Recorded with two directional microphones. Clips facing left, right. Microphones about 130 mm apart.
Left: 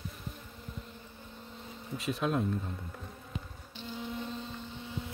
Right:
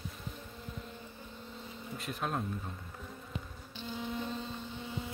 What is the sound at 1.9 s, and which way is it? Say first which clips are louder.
Speech: left 5 dB; 90° left.